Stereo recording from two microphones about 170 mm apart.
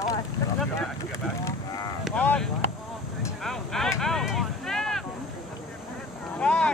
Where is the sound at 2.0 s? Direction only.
5° left (ahead or behind).